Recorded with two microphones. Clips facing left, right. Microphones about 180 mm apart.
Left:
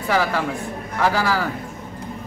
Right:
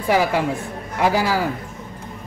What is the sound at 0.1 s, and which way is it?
A man's voice, 15° right (ahead or behind).